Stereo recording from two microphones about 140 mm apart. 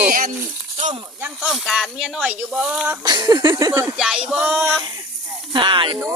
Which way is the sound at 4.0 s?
5° right (ahead or behind).